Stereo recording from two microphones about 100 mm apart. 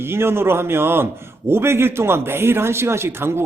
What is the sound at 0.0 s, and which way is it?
A man's voice, 25° right (ahead or behind).